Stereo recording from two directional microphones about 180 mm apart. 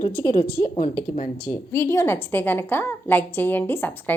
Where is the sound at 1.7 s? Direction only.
15° left (ahead or behind).